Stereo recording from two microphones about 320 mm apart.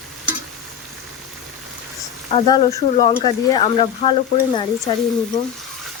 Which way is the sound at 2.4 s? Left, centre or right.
Centre.